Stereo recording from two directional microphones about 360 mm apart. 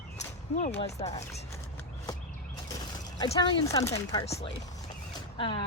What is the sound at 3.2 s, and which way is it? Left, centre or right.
A woman's voice, centre.